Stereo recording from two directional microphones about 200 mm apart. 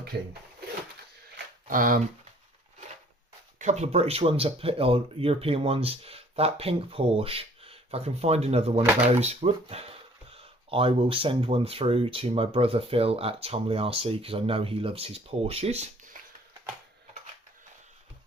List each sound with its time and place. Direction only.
0.1 s speech: 55° right (ahead or behind)
1.6 s speech: 45° right (ahead or behind)
3.6 s speech: 35° right (ahead or behind)